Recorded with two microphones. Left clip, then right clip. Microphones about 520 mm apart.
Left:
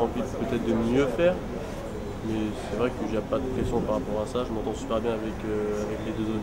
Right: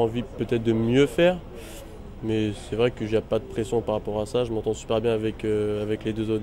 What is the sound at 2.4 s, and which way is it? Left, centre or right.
Speech, right.